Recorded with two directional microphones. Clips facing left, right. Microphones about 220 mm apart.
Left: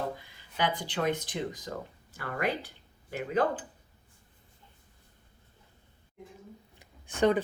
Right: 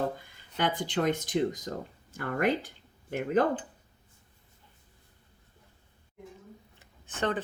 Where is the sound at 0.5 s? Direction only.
50° right (ahead or behind).